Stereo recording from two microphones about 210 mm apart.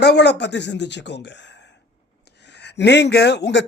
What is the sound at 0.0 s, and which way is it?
Speech, 55° left (ahead or behind).